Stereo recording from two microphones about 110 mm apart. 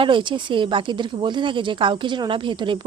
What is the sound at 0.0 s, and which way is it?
Speech, 45° right (ahead or behind).